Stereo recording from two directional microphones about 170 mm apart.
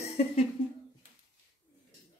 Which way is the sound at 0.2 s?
40° left (ahead or behind).